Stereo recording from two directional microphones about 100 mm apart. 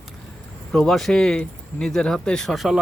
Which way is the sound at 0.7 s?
5° left (ahead or behind).